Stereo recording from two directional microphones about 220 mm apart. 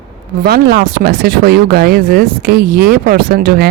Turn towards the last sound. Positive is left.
turn(degrees=-45)  # may be behind; listen again after turning